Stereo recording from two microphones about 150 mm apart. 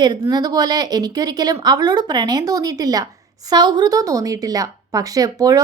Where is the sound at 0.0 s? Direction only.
25° right (ahead or behind).